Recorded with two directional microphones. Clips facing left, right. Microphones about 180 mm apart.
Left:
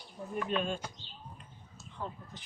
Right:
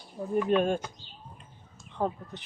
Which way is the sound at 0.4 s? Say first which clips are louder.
Right 8 dB; 50° right (ahead or behind).